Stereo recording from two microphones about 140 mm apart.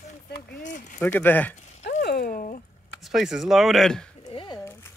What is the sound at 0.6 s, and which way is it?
Speech, 65° left (ahead or behind).